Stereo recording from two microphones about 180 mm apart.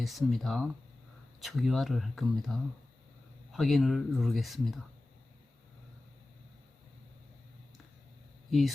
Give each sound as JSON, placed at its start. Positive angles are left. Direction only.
{"t": 0.0, "sound": "speech", "side_deg": 0}
{"t": 8.4, "sound": "speech", "side_deg": 0}